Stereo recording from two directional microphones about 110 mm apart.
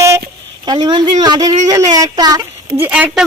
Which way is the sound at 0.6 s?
40° right (ahead or behind).